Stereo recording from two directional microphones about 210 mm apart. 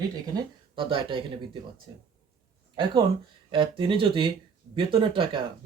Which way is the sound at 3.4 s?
25° right (ahead or behind).